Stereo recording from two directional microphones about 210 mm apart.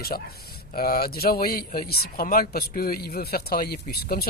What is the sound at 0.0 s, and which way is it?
A man's voice, 45° left (ahead or behind).